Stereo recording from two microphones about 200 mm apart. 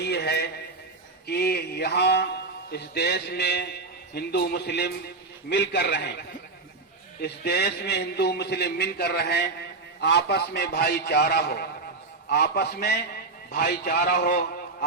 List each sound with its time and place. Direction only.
0.0 s a sound: 55° left (ahead or behind)
1.3 s a man's voice: 55° left (ahead or behind)
7.2 s a man's voice: 55° left (ahead or behind)